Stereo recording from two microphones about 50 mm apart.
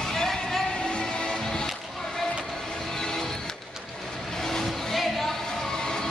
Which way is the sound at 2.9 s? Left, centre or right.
Centre.